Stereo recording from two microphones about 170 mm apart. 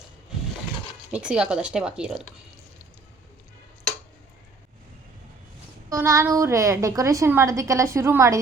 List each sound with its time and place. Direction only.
1.1 s speech: 5° right (ahead or behind)
5.9 s a woman's voice: 15° right (ahead or behind)